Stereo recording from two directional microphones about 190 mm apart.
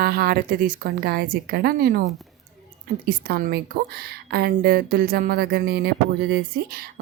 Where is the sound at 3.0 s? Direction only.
55° right (ahead or behind).